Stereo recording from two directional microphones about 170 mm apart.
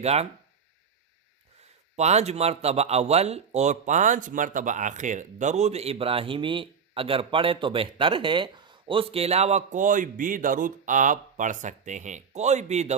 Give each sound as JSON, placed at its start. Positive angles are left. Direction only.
{"t": 0.0, "sound": "speech", "side_deg": -40}
{"t": 2.0, "sound": "speech", "side_deg": -40}